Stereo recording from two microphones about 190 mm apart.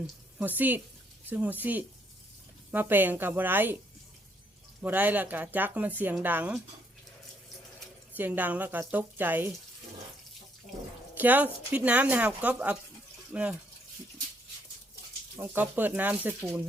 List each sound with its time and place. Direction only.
0.3 s a woman's voice: 10° right (ahead or behind)
4.8 s speech: 10° right (ahead or behind)
8.1 s speech: 10° right (ahead or behind)
11.1 s a sound: 10° right (ahead or behind)
11.7 s speech: 5° right (ahead or behind)
15.4 s speech: 10° right (ahead or behind)